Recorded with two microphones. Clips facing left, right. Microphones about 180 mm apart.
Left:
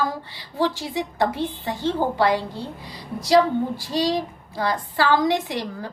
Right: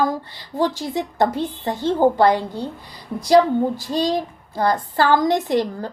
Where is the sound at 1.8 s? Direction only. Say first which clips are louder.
Right 2 dB; 15° right (ahead or behind).